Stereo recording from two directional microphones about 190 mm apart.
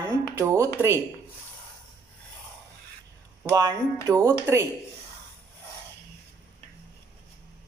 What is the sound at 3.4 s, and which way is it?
Speech, 15° right (ahead or behind).